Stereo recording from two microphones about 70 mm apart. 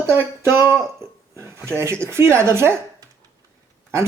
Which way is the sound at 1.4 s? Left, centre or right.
Right.